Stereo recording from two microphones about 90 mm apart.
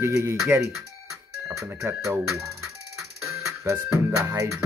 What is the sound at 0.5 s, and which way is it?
Speech, 25° right (ahead or behind).